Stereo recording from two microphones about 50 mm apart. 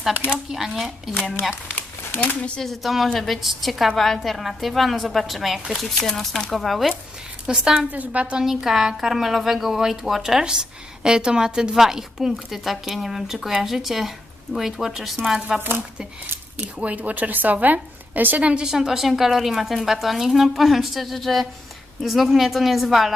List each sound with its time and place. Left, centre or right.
0.5 s a woman's voice: centre
2.6 s a woman's voice: centre
7.4 s speech: centre
7.9 s a woman's voice: right
8.4 s speech: centre
16.6 s a woman's voice: right
18.6 s a woman's voice: centre